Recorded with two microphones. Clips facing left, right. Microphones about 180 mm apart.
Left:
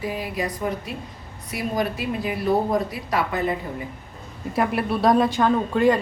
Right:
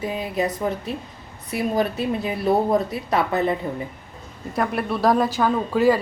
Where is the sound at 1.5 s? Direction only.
25° right (ahead or behind).